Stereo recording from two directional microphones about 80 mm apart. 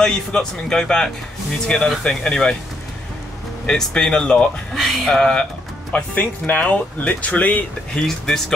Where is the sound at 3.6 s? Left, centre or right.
Centre.